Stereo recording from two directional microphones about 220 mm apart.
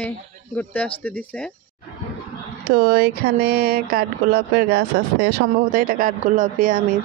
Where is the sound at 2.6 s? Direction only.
45° right (ahead or behind).